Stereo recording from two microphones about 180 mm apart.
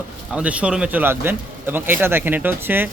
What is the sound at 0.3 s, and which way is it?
Speech, 5° right (ahead or behind).